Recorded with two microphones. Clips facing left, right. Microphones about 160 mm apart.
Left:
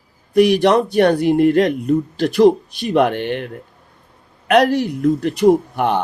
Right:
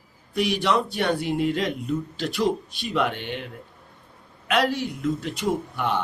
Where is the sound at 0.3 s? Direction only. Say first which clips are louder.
Left 10 dB; 65° left (ahead or behind).